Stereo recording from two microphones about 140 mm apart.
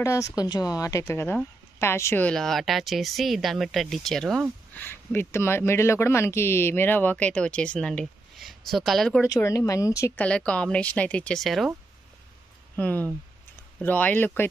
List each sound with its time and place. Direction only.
0.0 s a woman's voice: 20° left (ahead or behind); by 4.5 s centre (ahead or behind)
4.7 s speech: 15° left (ahead or behind)
9.3 s speech: 25° left (ahead or behind)
10.2 s speech: 10° left (ahead or behind)
12.7 s speech: 10° left (ahead or behind)